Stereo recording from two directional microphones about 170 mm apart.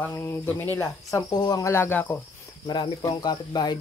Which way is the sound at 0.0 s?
15° left (ahead or behind).